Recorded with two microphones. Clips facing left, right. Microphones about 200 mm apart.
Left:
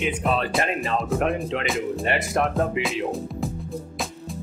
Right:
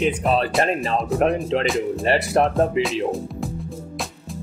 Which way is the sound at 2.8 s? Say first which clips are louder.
Right 3 dB; centre (ahead or behind).